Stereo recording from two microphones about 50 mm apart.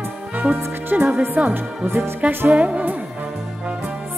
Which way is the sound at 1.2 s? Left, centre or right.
Right.